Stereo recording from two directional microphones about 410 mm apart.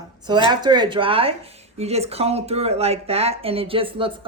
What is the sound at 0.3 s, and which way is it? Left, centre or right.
Speech, centre.